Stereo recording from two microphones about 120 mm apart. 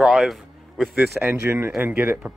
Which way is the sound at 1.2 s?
15° right (ahead or behind).